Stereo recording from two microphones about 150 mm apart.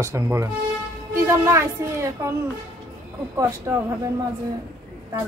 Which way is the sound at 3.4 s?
20° right (ahead or behind).